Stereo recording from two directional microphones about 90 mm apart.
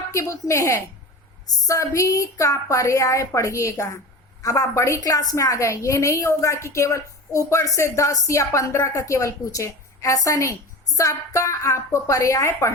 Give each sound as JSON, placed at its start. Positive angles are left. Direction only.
{"t": 0.1, "sound": "a woman's voice", "side_deg": 35}